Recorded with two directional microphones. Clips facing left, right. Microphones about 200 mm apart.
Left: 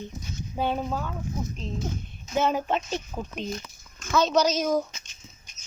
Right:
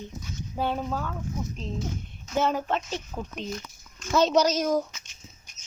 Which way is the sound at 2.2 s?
15° left (ahead or behind).